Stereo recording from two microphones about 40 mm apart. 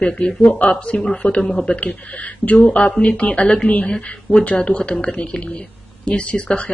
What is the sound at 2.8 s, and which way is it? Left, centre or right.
Speech, left.